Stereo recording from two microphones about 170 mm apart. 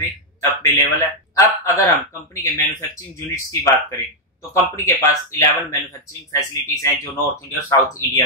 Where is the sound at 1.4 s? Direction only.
15° left (ahead or behind).